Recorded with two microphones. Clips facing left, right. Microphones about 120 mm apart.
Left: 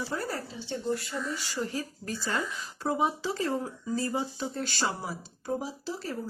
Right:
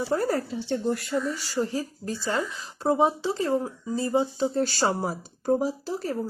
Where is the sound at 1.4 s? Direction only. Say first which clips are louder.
Right 5 dB; 35° right (ahead or behind).